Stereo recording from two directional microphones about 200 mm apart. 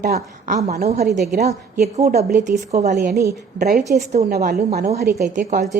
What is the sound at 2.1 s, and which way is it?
A woman's voice, 40° right (ahead or behind).